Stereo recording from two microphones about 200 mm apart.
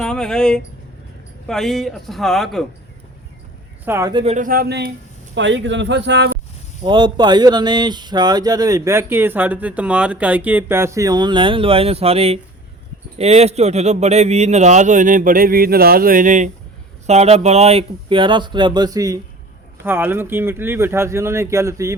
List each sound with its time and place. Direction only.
0.0 s speech: 5° left (ahead or behind)
3.8 s speech: 15° right (ahead or behind)
4.2 s speech: 35° right (ahead or behind); by 4.9 s 50° right (ahead or behind)
5.3 s speech: 65° right (ahead or behind)
6.8 s speech: 20° right (ahead or behind)